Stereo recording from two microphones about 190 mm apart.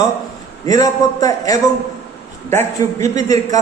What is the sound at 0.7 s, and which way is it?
A man's voice, 20° left (ahead or behind).